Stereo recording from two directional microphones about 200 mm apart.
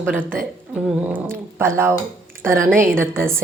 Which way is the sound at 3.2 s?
10° right (ahead or behind).